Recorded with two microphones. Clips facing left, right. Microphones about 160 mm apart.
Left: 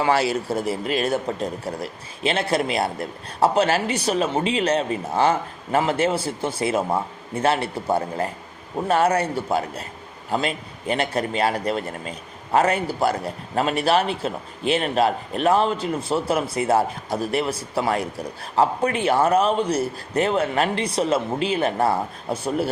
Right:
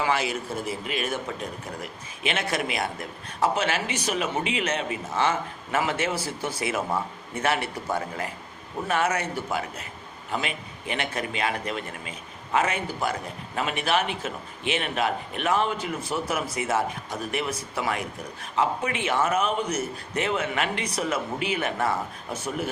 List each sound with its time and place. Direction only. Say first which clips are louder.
0.0 s speech: left 6 dB; 35° left (ahead or behind)